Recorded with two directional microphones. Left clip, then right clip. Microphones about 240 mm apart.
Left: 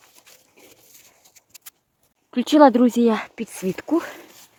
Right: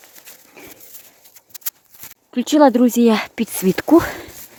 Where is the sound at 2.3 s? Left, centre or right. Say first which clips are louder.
Right 1 dB; centre.